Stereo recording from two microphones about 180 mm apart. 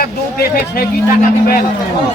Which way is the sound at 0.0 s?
60° left (ahead or behind).